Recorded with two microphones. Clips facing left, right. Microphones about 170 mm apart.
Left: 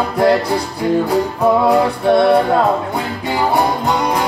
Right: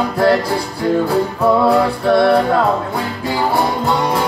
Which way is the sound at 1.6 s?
20° left (ahead or behind).